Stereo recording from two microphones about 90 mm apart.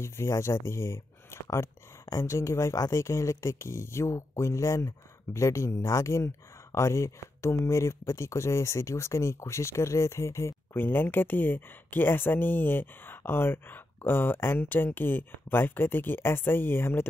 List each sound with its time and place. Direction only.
0.0 s speech: 30° left (ahead or behind)